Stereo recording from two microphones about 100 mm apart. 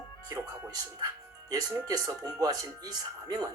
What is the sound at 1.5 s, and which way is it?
Speech, 40° right (ahead or behind).